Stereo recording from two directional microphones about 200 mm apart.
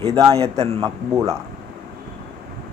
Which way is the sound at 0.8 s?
15° right (ahead or behind).